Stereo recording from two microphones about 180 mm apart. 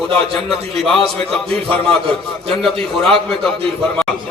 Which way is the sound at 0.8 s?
Centre (ahead or behind).